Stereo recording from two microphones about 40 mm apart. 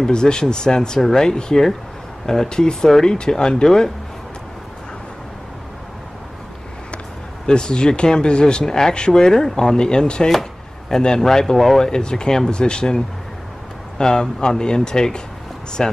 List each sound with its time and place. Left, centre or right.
0.0 s speech: centre
7.4 s a man's voice: left; by 11.9 s centre
11.9 s speech: centre